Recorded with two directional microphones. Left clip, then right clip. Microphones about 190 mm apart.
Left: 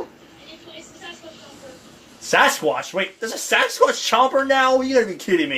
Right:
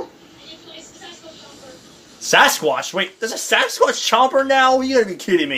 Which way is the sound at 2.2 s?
40° right (ahead or behind).